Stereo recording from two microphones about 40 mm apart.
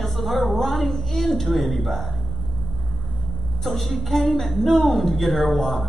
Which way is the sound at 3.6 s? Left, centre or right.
Centre.